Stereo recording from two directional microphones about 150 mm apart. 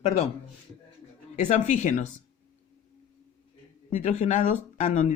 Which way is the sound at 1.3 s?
55° left (ahead or behind).